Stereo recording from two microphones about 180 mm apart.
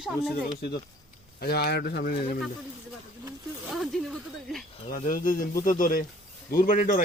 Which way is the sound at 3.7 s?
Centre (ahead or behind).